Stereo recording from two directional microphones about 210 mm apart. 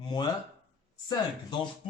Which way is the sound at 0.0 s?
20° left (ahead or behind).